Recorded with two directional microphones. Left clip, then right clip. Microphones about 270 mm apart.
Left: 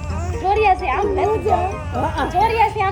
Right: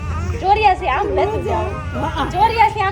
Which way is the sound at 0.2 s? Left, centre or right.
Centre.